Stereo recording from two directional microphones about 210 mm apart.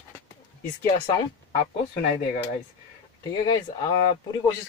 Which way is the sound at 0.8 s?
20° left (ahead or behind).